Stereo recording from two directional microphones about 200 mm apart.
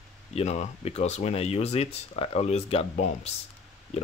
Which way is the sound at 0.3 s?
35° left (ahead or behind).